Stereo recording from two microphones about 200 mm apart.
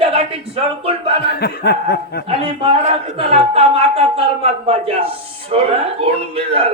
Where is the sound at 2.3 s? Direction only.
30° right (ahead or behind).